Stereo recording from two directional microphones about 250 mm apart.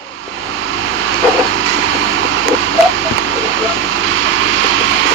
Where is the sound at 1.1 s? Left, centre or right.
Right.